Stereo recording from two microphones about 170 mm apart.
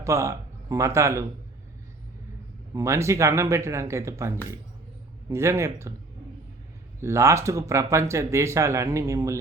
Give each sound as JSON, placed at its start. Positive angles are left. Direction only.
{"t": 0.0, "sound": "a man's voice", "side_deg": -15}
{"t": 2.7, "sound": "speech", "side_deg": -15}
{"t": 7.0, "sound": "speech", "side_deg": -15}